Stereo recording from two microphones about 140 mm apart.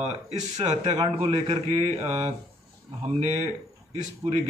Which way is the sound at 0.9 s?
35° right (ahead or behind).